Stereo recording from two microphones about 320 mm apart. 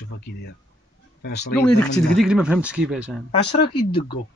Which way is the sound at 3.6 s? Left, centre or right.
Centre.